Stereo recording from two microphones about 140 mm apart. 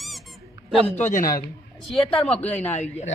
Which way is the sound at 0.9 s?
55° left (ahead or behind).